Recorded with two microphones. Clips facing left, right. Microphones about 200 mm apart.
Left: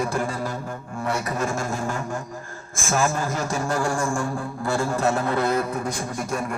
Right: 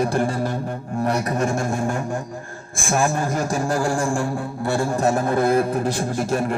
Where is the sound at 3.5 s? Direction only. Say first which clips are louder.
Right 2 dB; 35° right (ahead or behind).